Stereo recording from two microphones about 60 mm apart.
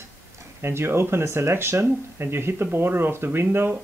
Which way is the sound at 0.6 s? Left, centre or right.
Right.